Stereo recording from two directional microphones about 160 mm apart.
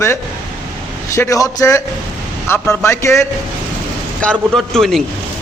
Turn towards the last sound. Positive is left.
turn(degrees=0)  # may be behind; listen again after turning